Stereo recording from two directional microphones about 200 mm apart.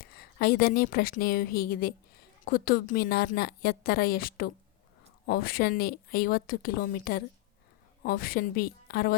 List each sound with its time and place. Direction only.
0.0 s a woman's voice: 50° left (ahead or behind)